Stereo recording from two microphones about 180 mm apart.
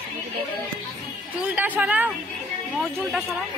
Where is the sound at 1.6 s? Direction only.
10° right (ahead or behind).